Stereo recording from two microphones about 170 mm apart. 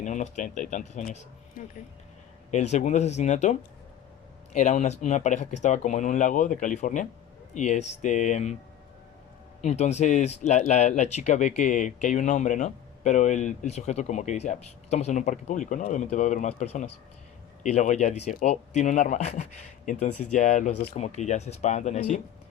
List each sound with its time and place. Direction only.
0.0 s speech: 45° left (ahead or behind)
1.6 s speech: 55° left (ahead or behind)
2.5 s speech: 45° left (ahead or behind)
9.6 s speech: 40° left (ahead or behind)